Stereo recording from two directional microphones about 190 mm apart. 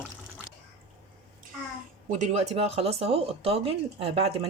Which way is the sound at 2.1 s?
40° right (ahead or behind).